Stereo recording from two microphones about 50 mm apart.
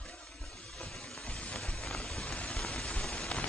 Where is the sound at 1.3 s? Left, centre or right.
Left.